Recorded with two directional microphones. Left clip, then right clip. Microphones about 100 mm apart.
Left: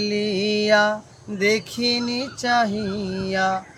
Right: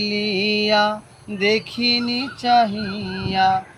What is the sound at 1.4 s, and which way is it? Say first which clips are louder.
Mantra: right 1 dB; 50° left (ahead or behind).